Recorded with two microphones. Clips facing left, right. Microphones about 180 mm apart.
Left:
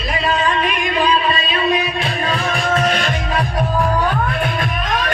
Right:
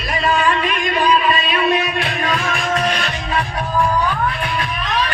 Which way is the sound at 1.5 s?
30° left (ahead or behind).